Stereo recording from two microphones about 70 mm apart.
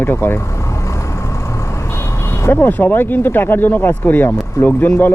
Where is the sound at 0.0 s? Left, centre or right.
Left.